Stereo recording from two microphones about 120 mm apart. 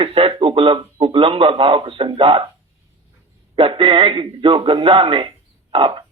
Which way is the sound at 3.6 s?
45° right (ahead or behind).